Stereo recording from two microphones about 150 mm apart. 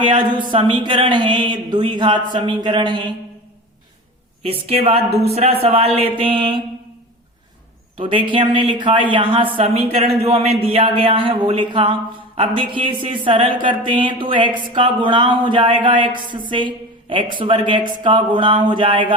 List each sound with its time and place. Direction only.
0.0 s speech: 35° right (ahead or behind)
4.4 s speech: 40° right (ahead or behind)
7.9 s speech: 35° right (ahead or behind)